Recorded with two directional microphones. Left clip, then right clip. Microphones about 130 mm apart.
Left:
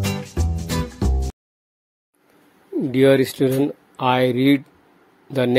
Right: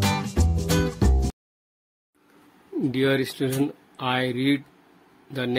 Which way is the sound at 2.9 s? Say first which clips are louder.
Left 9 dB; 45° left (ahead or behind).